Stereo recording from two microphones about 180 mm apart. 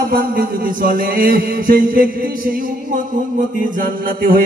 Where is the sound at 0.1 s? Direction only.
50° right (ahead or behind).